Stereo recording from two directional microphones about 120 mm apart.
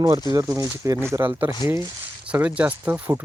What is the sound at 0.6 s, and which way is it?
Speech, 25° right (ahead or behind).